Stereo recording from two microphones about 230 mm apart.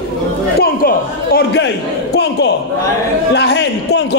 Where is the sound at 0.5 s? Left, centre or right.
Left.